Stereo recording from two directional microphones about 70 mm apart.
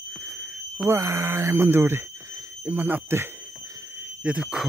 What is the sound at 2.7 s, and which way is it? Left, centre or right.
Speech, right.